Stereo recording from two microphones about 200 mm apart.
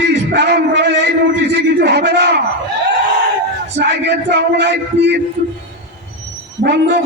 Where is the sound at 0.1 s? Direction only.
60° right (ahead or behind).